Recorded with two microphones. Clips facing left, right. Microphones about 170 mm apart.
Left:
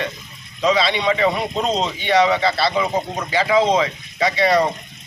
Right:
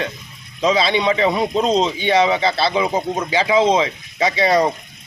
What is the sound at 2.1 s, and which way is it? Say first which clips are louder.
A man's voice: left 1 dB; 25° right (ahead or behind).